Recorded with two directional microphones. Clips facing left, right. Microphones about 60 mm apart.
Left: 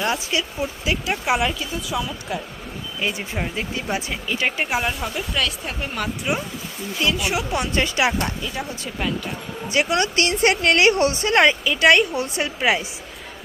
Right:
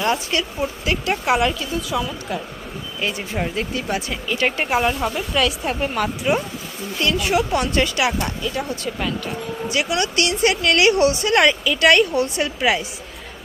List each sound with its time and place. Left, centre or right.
0.0 s a woman's voice: centre; by 8.1 s left
8.5 s a woman's voice: centre
9.6 s a woman's voice: left